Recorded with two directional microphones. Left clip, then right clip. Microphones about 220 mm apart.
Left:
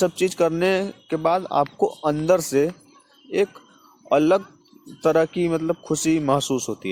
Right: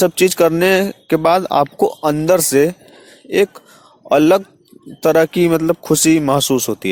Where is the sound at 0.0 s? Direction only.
35° right (ahead or behind).